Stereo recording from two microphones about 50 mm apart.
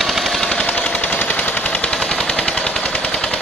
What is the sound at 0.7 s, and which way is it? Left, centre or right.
Machine gun, left.